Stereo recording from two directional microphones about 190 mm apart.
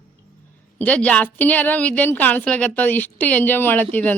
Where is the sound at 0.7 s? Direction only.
10° left (ahead or behind).